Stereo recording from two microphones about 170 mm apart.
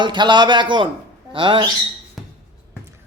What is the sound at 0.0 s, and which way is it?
A man's voice, 25° right (ahead or behind).